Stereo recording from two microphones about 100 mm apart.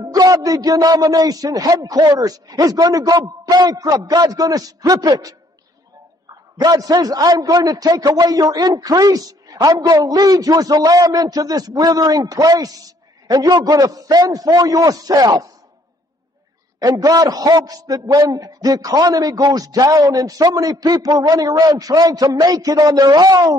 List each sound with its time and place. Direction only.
0.0 s a man's voice: 40° right (ahead or behind)
16.8 s a man's voice: 40° right (ahead or behind)